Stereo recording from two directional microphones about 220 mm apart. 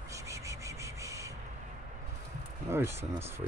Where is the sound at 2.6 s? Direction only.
10° right (ahead or behind).